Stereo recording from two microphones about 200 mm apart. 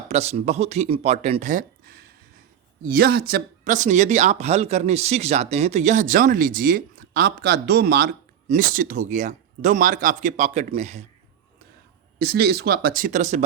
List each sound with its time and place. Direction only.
0.1 s speech: 35° right (ahead or behind)
12.2 s speech: 50° right (ahead or behind); by 13.4 s 35° right (ahead or behind)